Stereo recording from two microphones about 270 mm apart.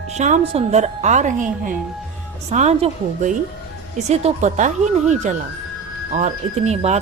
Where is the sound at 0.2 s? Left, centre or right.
Right.